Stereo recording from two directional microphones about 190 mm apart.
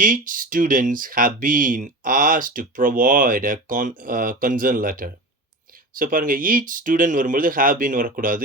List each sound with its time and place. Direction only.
0.0 s speech: 45° right (ahead or behind)